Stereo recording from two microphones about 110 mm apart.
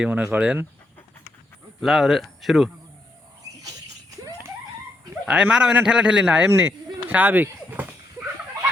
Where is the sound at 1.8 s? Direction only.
Centre (ahead or behind).